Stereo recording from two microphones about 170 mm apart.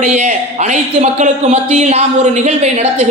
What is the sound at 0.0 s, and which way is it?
Speech, 45° right (ahead or behind).